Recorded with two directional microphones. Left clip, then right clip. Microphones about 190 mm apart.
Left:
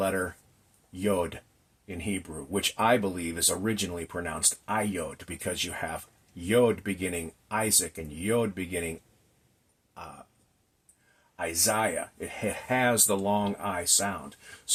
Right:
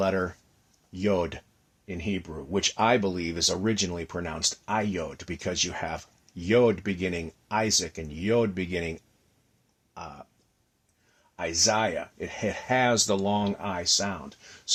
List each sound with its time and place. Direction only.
0.0 s speech: 40° right (ahead or behind)
11.3 s speech: 40° right (ahead or behind)